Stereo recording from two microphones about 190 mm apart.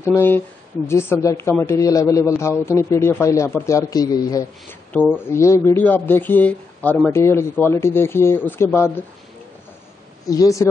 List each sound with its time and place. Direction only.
0.0 s speech: 10° left (ahead or behind)
10.2 s speech: 20° left (ahead or behind)